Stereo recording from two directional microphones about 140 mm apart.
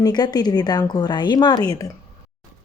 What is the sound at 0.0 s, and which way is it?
A woman's voice, 30° left (ahead or behind).